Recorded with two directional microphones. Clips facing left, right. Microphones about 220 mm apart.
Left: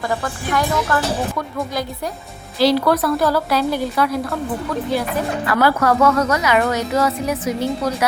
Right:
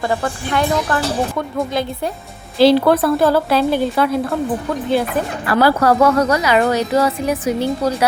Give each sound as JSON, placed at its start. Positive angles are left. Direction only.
{"t": 0.1, "sound": "a woman's voice", "side_deg": -25}
{"t": 2.6, "sound": "a woman's voice", "side_deg": -25}
{"t": 5.5, "sound": "a woman's voice", "side_deg": -30}